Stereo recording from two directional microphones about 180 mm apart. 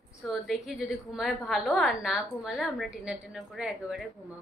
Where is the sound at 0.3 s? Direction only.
Centre (ahead or behind).